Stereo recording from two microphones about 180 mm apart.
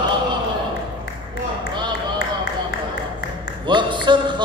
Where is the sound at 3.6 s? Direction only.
25° right (ahead or behind).